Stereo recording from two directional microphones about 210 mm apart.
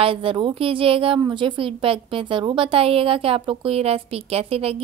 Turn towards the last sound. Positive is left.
turn(degrees=-25)  # may be behind; listen again after turning